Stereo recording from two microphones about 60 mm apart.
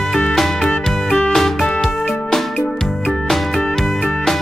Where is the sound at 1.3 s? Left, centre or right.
Centre.